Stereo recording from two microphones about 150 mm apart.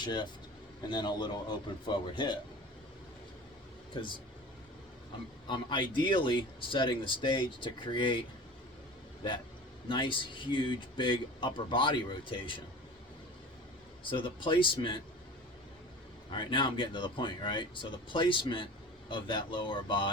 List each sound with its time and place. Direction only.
0.0 s a man's voice: 30° left (ahead or behind)
3.9 s speech: 35° left (ahead or behind)
5.5 s speech: 30° left (ahead or behind)
9.2 s speech: 30° left (ahead or behind)
14.0 s speech: 35° left (ahead or behind)
16.3 s speech: 35° left (ahead or behind)